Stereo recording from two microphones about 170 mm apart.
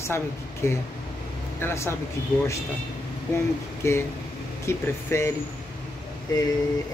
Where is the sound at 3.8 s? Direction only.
15° left (ahead or behind).